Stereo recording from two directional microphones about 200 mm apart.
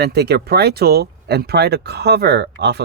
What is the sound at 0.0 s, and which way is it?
Speech, 55° right (ahead or behind).